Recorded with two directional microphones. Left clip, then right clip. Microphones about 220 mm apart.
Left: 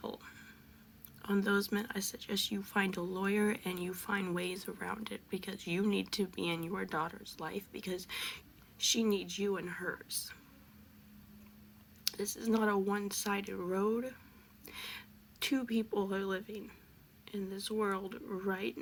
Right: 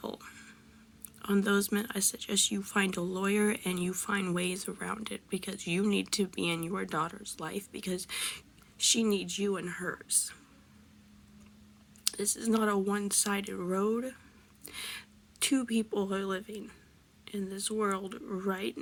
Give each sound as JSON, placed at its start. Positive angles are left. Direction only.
{"t": 0.0, "sound": "a sound", "side_deg": -30}
{"t": 1.2, "sound": "speech", "side_deg": -30}
{"t": 12.0, "sound": "speech", "side_deg": -25}